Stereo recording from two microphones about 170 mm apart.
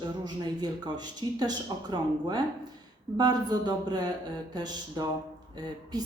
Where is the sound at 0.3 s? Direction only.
25° right (ahead or behind).